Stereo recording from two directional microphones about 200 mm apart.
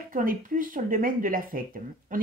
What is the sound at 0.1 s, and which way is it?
Speech, 40° right (ahead or behind).